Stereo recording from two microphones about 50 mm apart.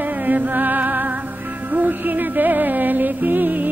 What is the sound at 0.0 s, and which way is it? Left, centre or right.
Music, right.